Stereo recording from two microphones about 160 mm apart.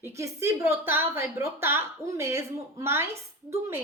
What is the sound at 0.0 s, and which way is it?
A woman's voice, 20° right (ahead or behind).